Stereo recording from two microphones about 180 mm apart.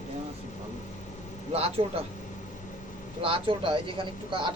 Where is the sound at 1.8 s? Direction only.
35° right (ahead or behind).